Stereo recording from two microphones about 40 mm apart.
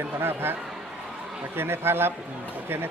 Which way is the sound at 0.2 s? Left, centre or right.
Right.